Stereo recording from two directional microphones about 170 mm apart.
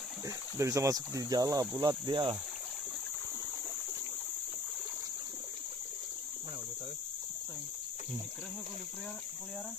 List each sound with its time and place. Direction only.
0.6 s speech: 20° right (ahead or behind)